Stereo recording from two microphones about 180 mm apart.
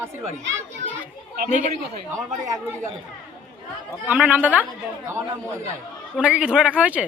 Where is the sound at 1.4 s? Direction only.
45° right (ahead or behind).